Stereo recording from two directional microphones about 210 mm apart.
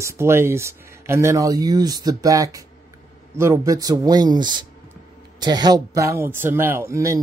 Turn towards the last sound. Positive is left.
turn(degrees=-15)  # may be behind; listen again after turning